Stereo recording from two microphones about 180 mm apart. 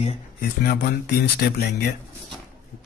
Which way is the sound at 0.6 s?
60° left (ahead or behind).